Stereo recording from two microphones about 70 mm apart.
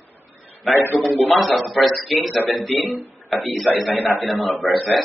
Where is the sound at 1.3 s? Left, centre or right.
Centre.